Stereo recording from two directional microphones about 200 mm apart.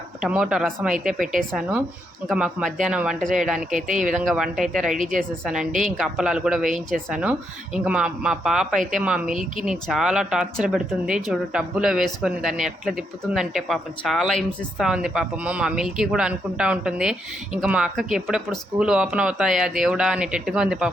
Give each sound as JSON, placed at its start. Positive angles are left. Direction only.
{"t": 0.2, "sound": "speech", "side_deg": -5}
{"t": 3.7, "sound": "speech", "side_deg": -40}
{"t": 4.1, "sound": "speech", "side_deg": 0}
{"t": 6.0, "sound": "speech", "side_deg": -5}